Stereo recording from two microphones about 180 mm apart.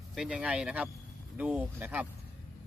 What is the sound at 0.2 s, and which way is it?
Speech, 5° right (ahead or behind).